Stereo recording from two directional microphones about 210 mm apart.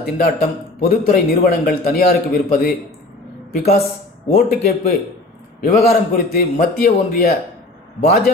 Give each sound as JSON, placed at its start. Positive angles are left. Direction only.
{"t": 0.2, "sound": "a man's voice", "side_deg": 45}